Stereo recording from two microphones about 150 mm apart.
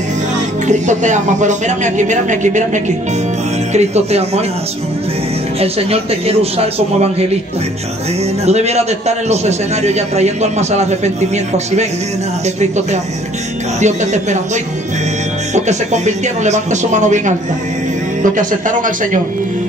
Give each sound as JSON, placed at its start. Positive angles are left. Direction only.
{"t": 0.7, "sound": "a man's voice", "side_deg": -55}
{"t": 5.6, "sound": "a man's voice", "side_deg": -40}
{"t": 8.5, "sound": "a man's voice", "side_deg": -45}
{"t": 18.2, "sound": "speech", "side_deg": -60}